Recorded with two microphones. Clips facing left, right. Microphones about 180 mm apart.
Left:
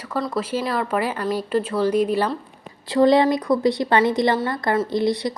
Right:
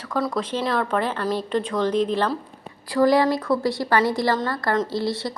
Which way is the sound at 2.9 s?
25° left (ahead or behind).